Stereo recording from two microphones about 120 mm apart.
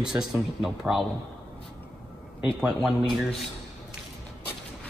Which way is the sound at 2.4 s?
Centre (ahead or behind).